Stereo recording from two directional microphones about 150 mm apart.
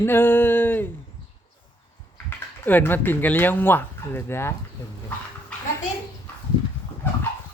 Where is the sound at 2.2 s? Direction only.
10° left (ahead or behind).